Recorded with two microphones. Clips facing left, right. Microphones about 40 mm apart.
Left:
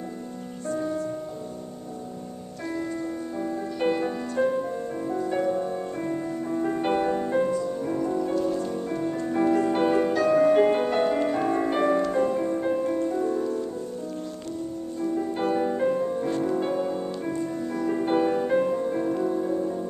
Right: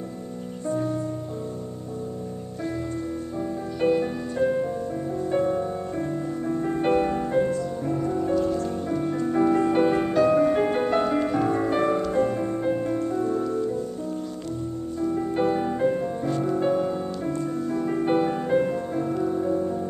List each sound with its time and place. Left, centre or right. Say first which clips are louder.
3.3 s music: right 1 dB; centre
6.6 s music: right 2 dB; centre
10.5 s music: left 2 dB; centre
15.0 s music: right 2 dB; centre